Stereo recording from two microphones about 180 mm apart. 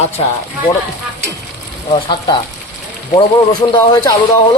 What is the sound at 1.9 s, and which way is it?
Speech, 25° left (ahead or behind).